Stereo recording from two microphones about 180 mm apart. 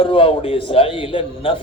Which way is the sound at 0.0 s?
30° left (ahead or behind).